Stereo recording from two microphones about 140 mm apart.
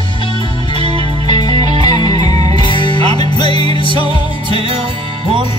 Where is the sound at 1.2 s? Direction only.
30° left (ahead or behind).